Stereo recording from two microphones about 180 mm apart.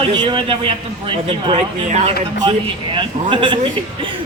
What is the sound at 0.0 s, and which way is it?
A man's voice, 30° right (ahead or behind).